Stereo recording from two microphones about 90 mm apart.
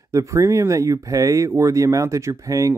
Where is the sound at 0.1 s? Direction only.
35° right (ahead or behind).